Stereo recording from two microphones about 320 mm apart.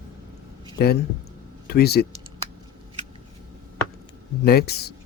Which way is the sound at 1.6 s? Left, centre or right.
Left.